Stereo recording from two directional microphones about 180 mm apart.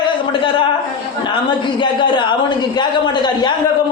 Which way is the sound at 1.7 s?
25° left (ahead or behind).